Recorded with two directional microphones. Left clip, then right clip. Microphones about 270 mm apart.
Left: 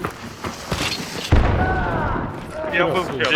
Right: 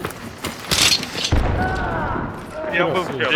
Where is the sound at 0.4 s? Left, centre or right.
Right.